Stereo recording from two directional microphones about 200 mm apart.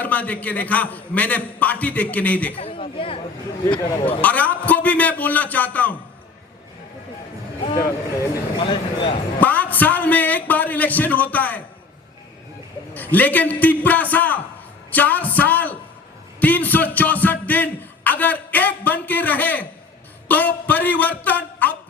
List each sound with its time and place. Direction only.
0.0 s a man's voice: 5° left (ahead or behind)
2.6 s a sound: 25° left (ahead or behind)
4.2 s a man's voice: 10° left (ahead or behind)
8.1 s speech: 20° left (ahead or behind)
9.4 s a man's voice: 10° left (ahead or behind)
12.9 s a man's voice: 10° left (ahead or behind)
16.4 s a sound: 10° left (ahead or behind)
20.2 s a man's voice: 10° left (ahead or behind)